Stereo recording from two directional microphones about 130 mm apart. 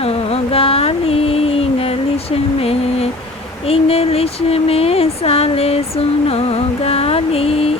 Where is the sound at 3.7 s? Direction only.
50° left (ahead or behind).